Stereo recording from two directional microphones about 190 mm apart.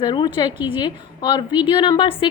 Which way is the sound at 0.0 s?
25° left (ahead or behind).